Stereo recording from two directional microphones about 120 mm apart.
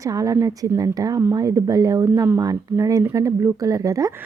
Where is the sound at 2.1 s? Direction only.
20° right (ahead or behind).